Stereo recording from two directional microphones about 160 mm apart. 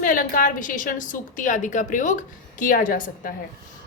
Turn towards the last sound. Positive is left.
turn(degrees=60)  # may be behind; listen again after turning